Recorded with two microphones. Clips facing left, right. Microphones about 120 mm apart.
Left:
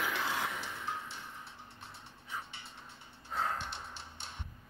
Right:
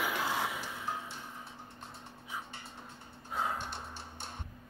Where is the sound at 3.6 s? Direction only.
45° right (ahead or behind).